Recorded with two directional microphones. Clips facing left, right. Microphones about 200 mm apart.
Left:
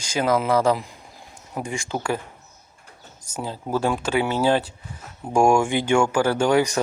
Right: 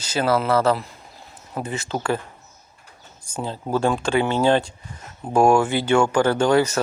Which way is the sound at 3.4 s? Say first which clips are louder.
Right 2 dB; 10° left (ahead or behind).